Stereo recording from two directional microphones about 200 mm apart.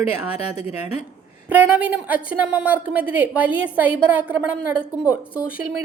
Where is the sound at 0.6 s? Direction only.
30° left (ahead or behind).